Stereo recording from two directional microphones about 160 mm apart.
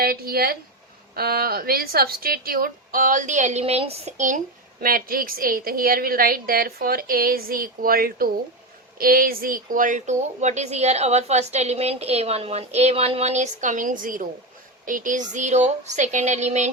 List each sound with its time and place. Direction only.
0.0 s a woman's voice: 70° right (ahead or behind); by 4.4 s 45° right (ahead or behind)
4.8 s a woman's voice: 65° right (ahead or behind); by 16.6 s 45° right (ahead or behind)